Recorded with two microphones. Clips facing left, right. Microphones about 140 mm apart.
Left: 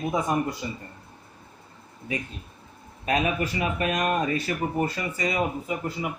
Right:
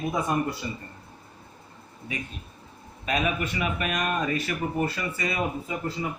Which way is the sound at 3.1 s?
35° left (ahead or behind).